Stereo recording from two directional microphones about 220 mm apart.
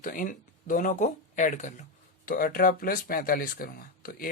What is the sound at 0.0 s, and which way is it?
A man's voice, 35° left (ahead or behind).